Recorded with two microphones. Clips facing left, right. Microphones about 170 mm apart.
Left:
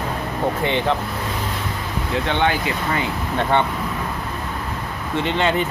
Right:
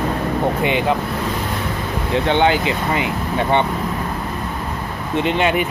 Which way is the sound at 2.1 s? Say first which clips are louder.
Right 5 dB; 30° right (ahead or behind).